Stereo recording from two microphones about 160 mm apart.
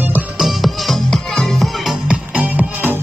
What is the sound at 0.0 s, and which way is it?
Music, 5° right (ahead or behind).